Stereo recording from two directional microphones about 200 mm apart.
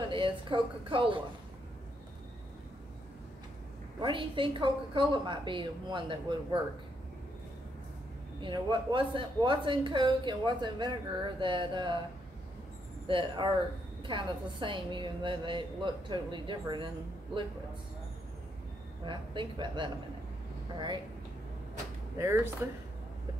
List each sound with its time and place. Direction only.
0.1 s speech: 25° right (ahead or behind)
4.0 s speech: 25° right (ahead or behind)
8.4 s speech: 25° right (ahead or behind)
13.0 s speech: 25° right (ahead or behind)
19.0 s speech: 25° right (ahead or behind)
22.2 s speech: 10° right (ahead or behind)